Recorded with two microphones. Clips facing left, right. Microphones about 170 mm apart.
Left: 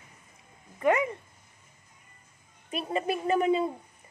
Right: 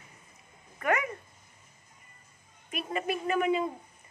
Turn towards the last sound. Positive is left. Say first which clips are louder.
# left 3 dB
turn(degrees=35)  # may be behind; listen again after turning